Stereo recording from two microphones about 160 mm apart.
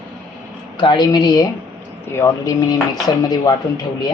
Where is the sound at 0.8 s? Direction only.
30° left (ahead or behind).